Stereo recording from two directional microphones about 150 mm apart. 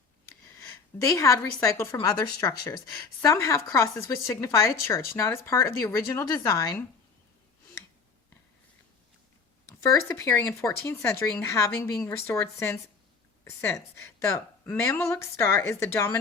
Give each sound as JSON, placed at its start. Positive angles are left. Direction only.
{"t": 0.7, "sound": "a woman's voice", "side_deg": 20}
{"t": 9.9, "sound": "speech", "side_deg": 15}